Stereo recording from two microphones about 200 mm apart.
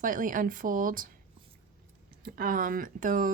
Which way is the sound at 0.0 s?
40° right (ahead or behind).